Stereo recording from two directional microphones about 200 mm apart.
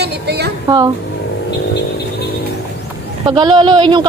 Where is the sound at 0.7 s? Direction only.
15° right (ahead or behind).